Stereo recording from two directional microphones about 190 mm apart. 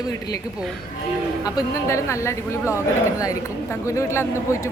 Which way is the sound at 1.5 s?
20° left (ahead or behind).